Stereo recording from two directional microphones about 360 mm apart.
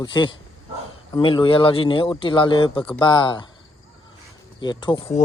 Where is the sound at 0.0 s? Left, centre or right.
Centre.